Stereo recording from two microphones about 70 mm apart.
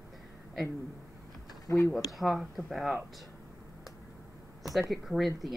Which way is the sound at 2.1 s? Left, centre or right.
Centre.